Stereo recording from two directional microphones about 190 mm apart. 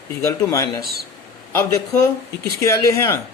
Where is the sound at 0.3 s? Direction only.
15° left (ahead or behind).